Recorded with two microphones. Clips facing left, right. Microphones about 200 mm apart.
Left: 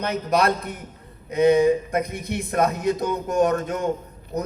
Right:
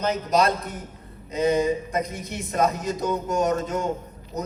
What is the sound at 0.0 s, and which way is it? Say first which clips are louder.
A man's voice: even; 60° left (ahead or behind).